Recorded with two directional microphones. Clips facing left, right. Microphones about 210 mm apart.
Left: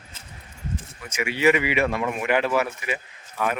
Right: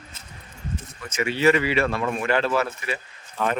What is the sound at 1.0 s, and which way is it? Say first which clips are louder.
Speech: right 1 dB; 15° left (ahead or behind).